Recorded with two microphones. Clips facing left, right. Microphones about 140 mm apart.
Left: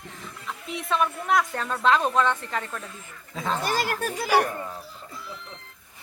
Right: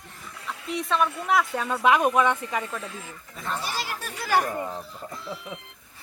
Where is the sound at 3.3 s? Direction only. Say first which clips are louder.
Left 4 dB; 90° left.